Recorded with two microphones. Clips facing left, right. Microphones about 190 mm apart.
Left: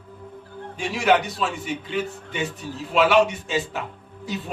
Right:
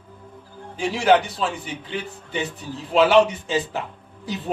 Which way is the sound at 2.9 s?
35° right (ahead or behind).